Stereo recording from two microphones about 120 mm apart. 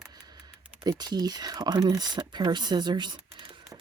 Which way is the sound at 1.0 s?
35° right (ahead or behind).